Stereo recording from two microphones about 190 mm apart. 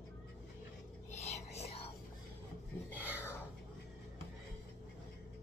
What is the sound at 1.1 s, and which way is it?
Whispering, 35° left (ahead or behind).